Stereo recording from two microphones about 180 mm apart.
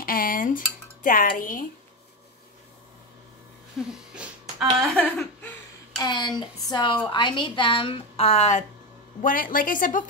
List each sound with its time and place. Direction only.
0.0 s speech: 50° left (ahead or behind)
3.8 s a sound: centre (ahead or behind)
4.9 s laughter: 10° left (ahead or behind)
5.9 s a woman's voice: 25° left (ahead or behind); by 10.0 s 50° left (ahead or behind)